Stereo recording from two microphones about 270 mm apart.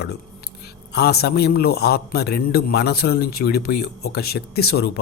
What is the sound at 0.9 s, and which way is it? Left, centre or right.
A man's voice, left.